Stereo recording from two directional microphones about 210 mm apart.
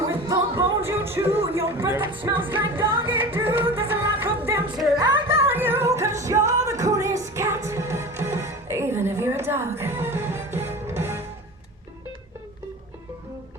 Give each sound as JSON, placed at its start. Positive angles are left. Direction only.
{"t": 0.0, "sound": "music", "side_deg": -15}
{"t": 2.0, "sound": "music", "side_deg": -25}
{"t": 2.3, "sound": "music", "side_deg": -10}
{"t": 5.5, "sound": "music", "side_deg": -10}